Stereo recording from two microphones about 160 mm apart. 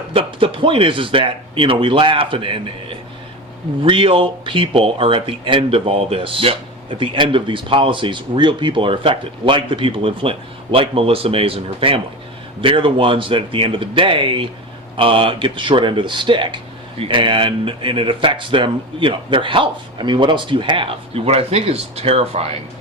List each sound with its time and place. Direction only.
0.1 s speech: 35° right (ahead or behind)